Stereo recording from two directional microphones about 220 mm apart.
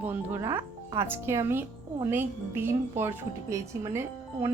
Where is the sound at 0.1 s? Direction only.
10° right (ahead or behind).